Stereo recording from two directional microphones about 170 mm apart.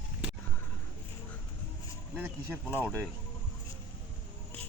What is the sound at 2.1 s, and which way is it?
Speech, 10° right (ahead or behind).